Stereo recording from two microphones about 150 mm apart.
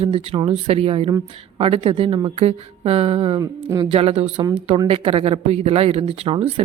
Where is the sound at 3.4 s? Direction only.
25° right (ahead or behind).